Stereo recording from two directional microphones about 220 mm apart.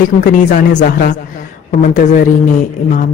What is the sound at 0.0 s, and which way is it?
A woman's voice, 40° left (ahead or behind).